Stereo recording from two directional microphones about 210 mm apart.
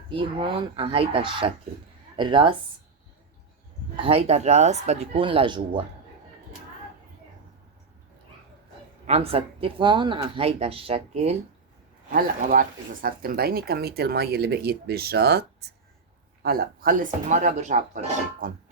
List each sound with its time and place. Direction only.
0.1 s speech: 25° right (ahead or behind)
3.9 s speech: 25° right (ahead or behind)
9.0 s speech: 30° right (ahead or behind)
12.1 s speech: 40° right (ahead or behind)